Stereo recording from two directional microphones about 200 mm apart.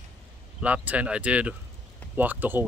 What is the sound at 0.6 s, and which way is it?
Speech, 5° right (ahead or behind).